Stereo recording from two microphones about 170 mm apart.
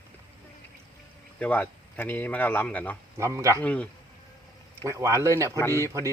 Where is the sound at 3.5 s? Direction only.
10° left (ahead or behind).